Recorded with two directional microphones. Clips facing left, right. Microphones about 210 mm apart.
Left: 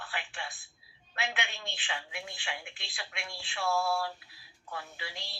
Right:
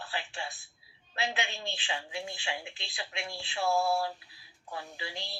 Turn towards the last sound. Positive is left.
turn(degrees=-25)  # may be behind; listen again after turning